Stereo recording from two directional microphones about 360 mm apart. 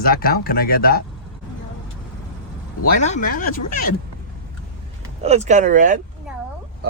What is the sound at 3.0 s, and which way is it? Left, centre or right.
Speech, centre.